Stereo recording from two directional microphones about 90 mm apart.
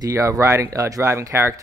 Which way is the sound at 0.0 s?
35° right (ahead or behind).